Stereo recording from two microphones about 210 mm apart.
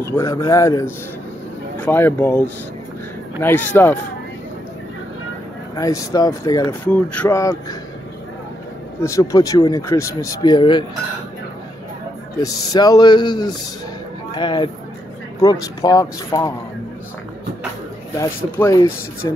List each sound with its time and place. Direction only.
0.0 s speech: 15° left (ahead or behind)
3.4 s speech: 10° left (ahead or behind)
5.8 s speech: 15° left (ahead or behind)
6.9 s speech: 5° left (ahead or behind)
9.0 s speech: 15° left (ahead or behind)
12.4 s speech: 15° left (ahead or behind)
18.1 s speech: 15° left (ahead or behind)